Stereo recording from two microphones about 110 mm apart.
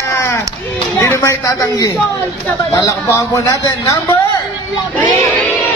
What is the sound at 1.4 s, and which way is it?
A man's voice, 35° left (ahead or behind).